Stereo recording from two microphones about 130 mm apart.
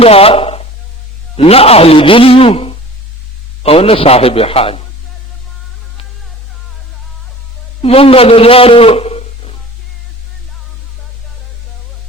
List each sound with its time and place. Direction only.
0.0 s speech: 50° left (ahead or behind)
7.8 s a man's voice: 50° left (ahead or behind)